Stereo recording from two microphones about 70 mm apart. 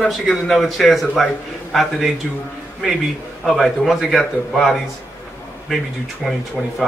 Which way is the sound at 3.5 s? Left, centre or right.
Centre.